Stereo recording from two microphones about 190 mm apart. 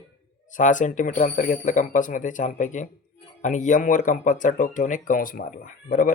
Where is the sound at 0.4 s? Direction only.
40° left (ahead or behind).